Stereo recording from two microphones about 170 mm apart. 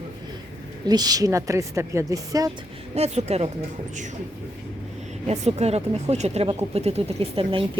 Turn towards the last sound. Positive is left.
turn(degrees=-35)  # may be behind; listen again after turning